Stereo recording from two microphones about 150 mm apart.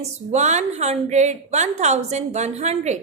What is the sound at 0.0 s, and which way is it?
A woman's voice, 45° right (ahead or behind).